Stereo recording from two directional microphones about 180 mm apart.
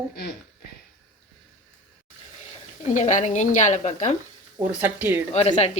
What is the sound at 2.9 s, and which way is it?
A woman's voice, 45° left (ahead or behind).